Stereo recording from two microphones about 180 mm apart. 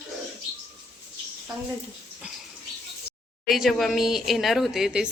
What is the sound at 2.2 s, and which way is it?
Pig, 5° right (ahead or behind).